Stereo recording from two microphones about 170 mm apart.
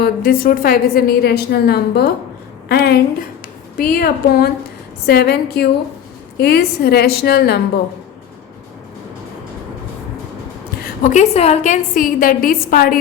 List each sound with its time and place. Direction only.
0.0 s a woman's voice: 60° left (ahead or behind)
11.0 s a woman's voice: 45° left (ahead or behind)